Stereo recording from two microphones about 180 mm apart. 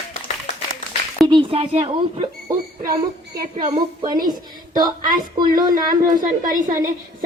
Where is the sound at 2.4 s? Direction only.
20° right (ahead or behind).